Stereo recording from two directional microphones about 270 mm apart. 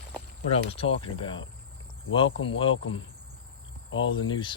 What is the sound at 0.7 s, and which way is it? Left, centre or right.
Speech, centre.